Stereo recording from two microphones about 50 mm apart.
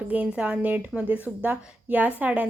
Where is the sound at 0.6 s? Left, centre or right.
Right.